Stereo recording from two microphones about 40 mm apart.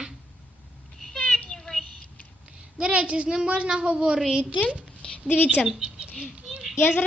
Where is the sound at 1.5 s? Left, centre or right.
Centre.